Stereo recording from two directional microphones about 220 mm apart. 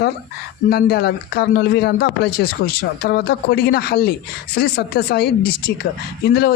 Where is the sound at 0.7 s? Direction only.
45° left (ahead or behind).